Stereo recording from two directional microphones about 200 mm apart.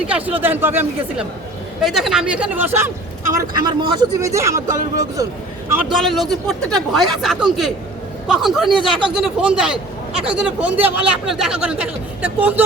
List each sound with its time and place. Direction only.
0.1 s a man's voice: 5° right (ahead or behind)
5.7 s speech: centre (ahead or behind)
8.7 s speech: 25° right (ahead or behind)
9.1 s speech: 5° right (ahead or behind)